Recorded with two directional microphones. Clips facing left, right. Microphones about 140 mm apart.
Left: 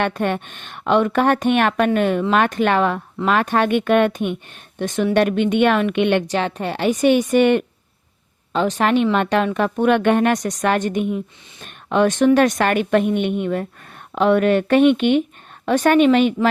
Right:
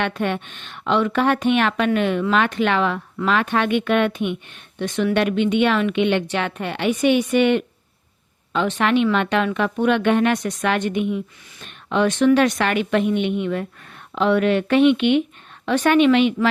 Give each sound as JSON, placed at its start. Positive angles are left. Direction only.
{"t": 0.0, "sound": "a woman's voice", "side_deg": 45}
{"t": 6.3, "sound": "a woman's voice", "side_deg": 35}